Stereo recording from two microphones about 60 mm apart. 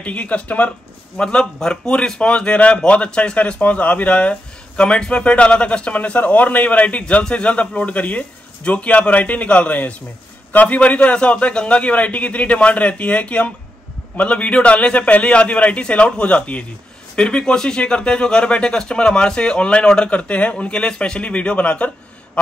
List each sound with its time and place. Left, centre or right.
0.0 s a man's voice: left